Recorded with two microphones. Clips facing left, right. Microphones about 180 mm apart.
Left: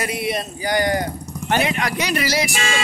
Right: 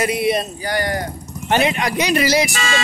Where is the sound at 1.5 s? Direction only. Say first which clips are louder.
Right 3 dB; 20° right (ahead or behind).